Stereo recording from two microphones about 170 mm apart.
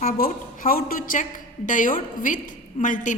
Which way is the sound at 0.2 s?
60° left (ahead or behind).